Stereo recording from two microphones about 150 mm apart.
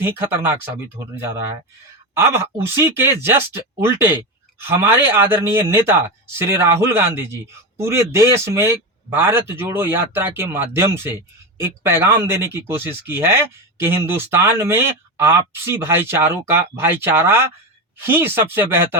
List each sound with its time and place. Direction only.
0.0 s speech: 15° right (ahead or behind)